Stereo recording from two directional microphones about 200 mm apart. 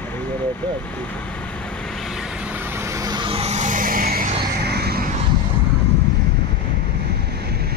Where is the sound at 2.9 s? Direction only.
20° right (ahead or behind); by 5.0 s 55° right (ahead or behind).